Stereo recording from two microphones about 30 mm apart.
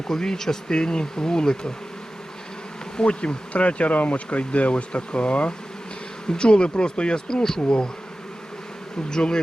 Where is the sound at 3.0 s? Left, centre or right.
Left.